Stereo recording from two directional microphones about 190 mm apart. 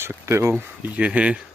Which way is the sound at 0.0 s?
15° right (ahead or behind).